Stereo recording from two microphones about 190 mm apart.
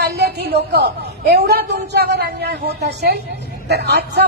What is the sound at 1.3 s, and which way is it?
Speech, 60° right (ahead or behind).